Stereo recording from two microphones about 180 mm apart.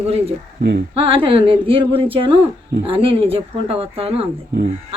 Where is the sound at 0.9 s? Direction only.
30° right (ahead or behind).